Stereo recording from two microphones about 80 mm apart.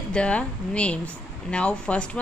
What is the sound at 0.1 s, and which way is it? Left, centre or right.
A woman's voice, centre.